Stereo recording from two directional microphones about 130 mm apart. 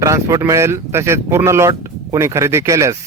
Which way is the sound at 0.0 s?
25° right (ahead or behind).